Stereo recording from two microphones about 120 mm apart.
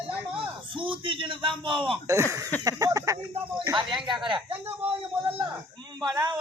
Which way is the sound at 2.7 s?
30° right (ahead or behind).